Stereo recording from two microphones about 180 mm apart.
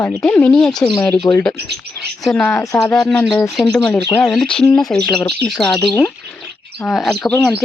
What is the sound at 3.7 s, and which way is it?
Speech, 15° left (ahead or behind).